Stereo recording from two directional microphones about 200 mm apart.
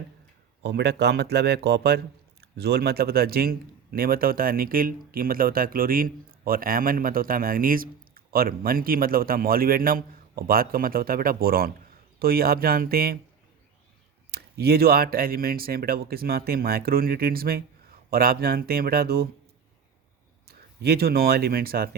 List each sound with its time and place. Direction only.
0.6 s speech: 55° right (ahead or behind)
14.3 s speech: 55° right (ahead or behind)
20.5 s speech: 50° right (ahead or behind)